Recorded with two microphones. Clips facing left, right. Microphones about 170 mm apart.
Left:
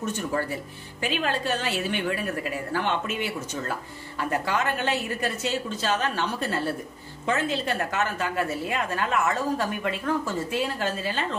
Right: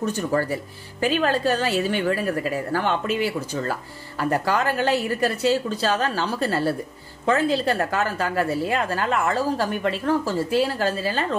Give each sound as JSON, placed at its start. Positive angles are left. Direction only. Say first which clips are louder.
{"t": 1.0, "sound": "a woman's voice", "louder": "right 6 dB", "side_deg": -40}